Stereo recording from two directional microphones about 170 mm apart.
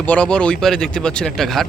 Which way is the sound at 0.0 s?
5° left (ahead or behind).